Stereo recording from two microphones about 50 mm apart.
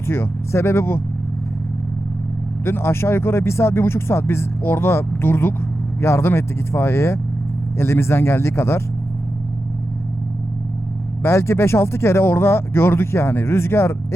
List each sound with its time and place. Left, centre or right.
0.1 s speech: left
2.6 s speech: left
6.0 s speech: left
11.2 s speech: left